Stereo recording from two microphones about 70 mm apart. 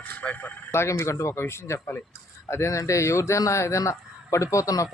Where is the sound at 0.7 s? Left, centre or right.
Left.